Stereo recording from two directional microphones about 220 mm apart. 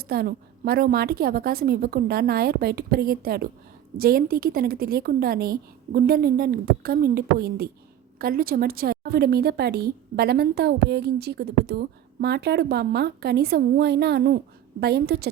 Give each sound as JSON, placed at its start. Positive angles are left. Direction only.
{"t": 0.0, "sound": "a woman's voice", "side_deg": -45}